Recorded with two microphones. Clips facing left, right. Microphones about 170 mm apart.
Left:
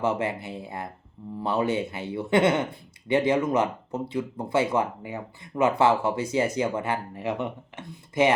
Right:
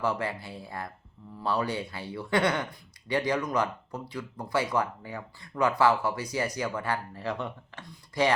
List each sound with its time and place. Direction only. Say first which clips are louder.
0.0 s speech: left 4 dB; 25° left (ahead or behind)